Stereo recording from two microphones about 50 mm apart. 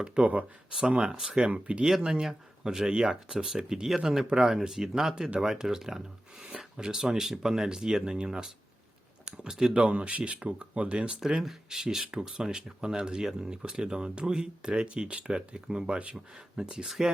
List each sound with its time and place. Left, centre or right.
0.0 s speech: centre
9.7 s speech: right
11.2 s speech: centre